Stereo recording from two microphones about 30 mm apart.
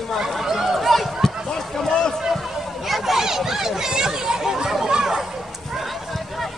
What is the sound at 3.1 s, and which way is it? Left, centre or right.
Chatter, centre.